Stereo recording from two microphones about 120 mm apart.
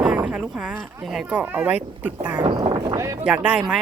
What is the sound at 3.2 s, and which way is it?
Speech, 10° right (ahead or behind).